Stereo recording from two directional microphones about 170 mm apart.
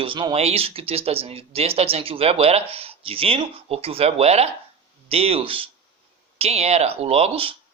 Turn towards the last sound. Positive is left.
turn(degrees=-35)  # may be behind; listen again after turning